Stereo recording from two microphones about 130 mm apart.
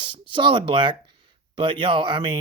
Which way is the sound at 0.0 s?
40° right (ahead or behind).